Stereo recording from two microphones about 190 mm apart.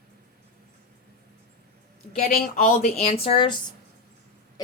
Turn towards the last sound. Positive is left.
turn(degrees=30)  # may be behind; listen again after turning